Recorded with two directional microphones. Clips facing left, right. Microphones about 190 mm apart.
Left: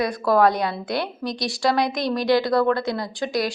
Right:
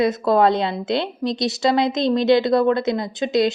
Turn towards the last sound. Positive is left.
turn(degrees=-20)  # may be behind; listen again after turning